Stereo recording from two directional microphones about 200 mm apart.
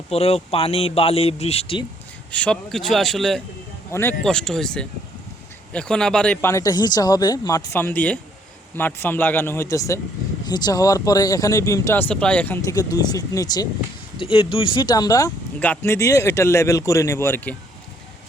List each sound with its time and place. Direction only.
0.1 s speech: 30° left (ahead or behind)
2.3 s speech: 5° left (ahead or behind)